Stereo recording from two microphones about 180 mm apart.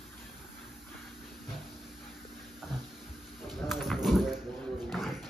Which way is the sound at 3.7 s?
Centre (ahead or behind).